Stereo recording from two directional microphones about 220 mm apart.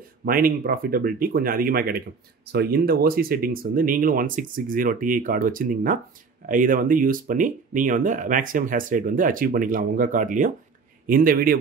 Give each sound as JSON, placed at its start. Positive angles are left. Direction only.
{"t": 0.2, "sound": "speech", "side_deg": -40}